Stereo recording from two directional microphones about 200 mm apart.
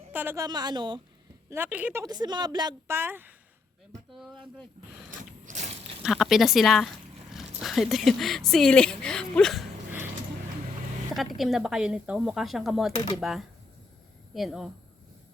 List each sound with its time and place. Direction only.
0.1 s a woman's voice: 10° right (ahead or behind)
1.5 s speech: 10° right (ahead or behind)
4.1 s speech: centre (ahead or behind)
5.5 s biting: 35° right (ahead or behind)
6.0 s speech: centre (ahead or behind)
11.1 s speech: centre (ahead or behind)